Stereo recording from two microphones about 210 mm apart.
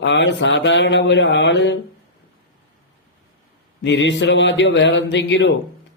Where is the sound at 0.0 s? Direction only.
55° left (ahead or behind).